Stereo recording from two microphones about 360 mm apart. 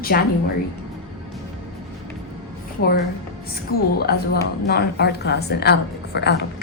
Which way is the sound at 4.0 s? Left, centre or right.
Left.